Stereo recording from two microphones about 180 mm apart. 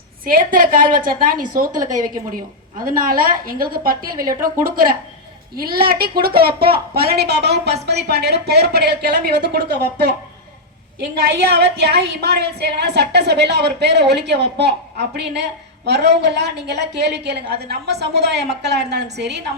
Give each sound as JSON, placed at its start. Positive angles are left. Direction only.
{"t": 0.3, "sound": "a woman's voice", "side_deg": -50}
{"t": 1.8, "sound": "a woman's voice", "side_deg": -20}
{"t": 2.8, "sound": "a woman's voice", "side_deg": -50}
{"t": 4.1, "sound": "a woman's voice", "side_deg": -20}
{"t": 4.4, "sound": "a woman's voice", "side_deg": -55}
{"t": 11.2, "sound": "a woman's voice", "side_deg": -65}